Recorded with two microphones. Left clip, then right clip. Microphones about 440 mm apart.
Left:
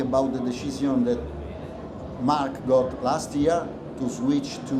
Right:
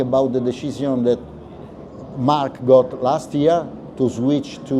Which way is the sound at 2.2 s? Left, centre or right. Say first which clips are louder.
Right 7 dB; right.